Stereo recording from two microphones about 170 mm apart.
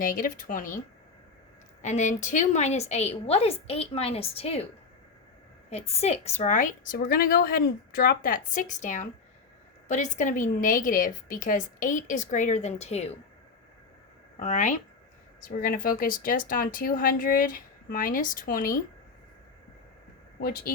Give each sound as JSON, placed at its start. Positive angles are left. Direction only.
{"t": 0.0, "sound": "speech", "side_deg": 55}
{"t": 1.8, "sound": "a woman's voice", "side_deg": 45}
{"t": 5.7, "sound": "speech", "side_deg": 40}
{"t": 14.3, "sound": "speech", "side_deg": 45}
{"t": 15.4, "sound": "speech", "side_deg": 55}
{"t": 20.4, "sound": "speech", "side_deg": 60}